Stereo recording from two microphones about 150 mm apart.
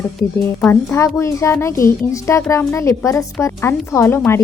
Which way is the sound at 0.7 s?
15° left (ahead or behind).